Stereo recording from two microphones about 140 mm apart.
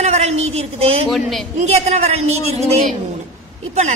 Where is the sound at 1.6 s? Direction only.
55° right (ahead or behind).